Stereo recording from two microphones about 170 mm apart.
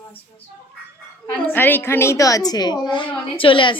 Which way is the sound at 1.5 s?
10° left (ahead or behind).